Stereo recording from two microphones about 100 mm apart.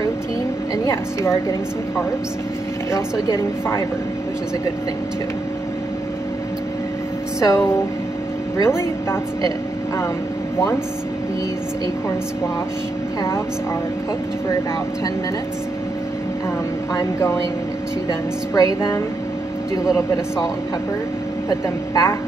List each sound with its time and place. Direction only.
0.8 s a woman's voice: 25° left (ahead or behind)
2.9 s a woman's voice: 25° left (ahead or behind)
7.3 s speech: 35° left (ahead or behind)
8.6 s a woman's voice: 25° left (ahead or behind)
18.5 s speech: 35° left (ahead or behind)
21.5 s speech: 35° left (ahead or behind)